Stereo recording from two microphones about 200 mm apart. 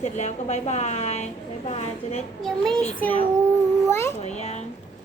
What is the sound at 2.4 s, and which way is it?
A child's voice, centre (ahead or behind).